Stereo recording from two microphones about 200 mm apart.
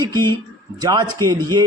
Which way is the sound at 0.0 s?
20° right (ahead or behind).